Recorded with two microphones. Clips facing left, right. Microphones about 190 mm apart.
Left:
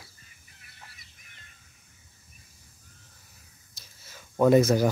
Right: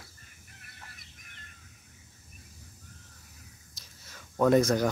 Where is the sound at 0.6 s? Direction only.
50° right (ahead or behind).